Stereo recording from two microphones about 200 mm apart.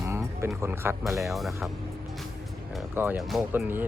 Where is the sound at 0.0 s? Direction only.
15° right (ahead or behind).